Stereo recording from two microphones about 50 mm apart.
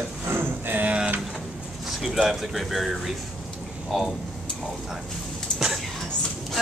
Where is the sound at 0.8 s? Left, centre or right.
Right.